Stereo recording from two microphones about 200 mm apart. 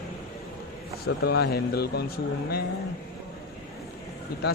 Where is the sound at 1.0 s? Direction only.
50° left (ahead or behind).